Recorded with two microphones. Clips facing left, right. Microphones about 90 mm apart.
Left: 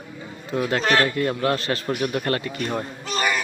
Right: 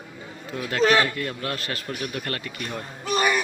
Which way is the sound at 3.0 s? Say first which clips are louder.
Right 3 dB; 15° right (ahead or behind).